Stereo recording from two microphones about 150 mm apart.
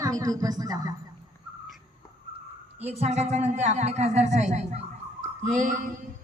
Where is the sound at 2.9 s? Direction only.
45° right (ahead or behind).